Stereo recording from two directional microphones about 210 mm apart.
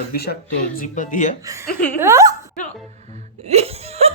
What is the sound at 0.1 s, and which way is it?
Speech, 50° left (ahead or behind).